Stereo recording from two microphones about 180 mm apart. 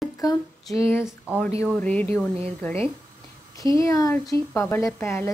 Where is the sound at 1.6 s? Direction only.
10° left (ahead or behind).